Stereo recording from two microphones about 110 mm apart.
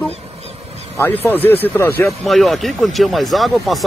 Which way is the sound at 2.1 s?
Centre (ahead or behind).